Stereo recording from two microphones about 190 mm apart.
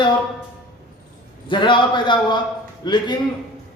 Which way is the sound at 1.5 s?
25° left (ahead or behind).